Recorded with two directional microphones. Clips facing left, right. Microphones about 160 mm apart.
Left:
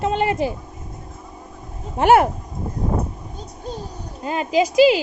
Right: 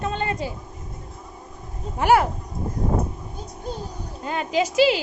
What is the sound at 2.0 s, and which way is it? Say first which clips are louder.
Speech: left 4 dB; 25° left (ahead or behind).